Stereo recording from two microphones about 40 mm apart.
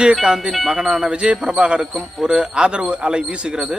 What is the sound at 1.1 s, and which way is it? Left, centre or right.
Speech, right.